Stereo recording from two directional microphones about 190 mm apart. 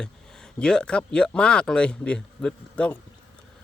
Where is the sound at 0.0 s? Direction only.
5° left (ahead or behind).